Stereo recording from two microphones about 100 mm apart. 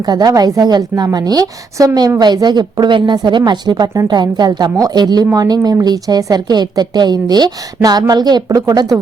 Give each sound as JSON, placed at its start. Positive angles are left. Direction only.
{"t": 0.0, "sound": "speech", "side_deg": -40}